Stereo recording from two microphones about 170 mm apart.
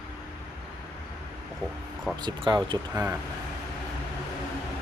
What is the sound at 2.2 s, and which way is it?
Speech, 25° right (ahead or behind).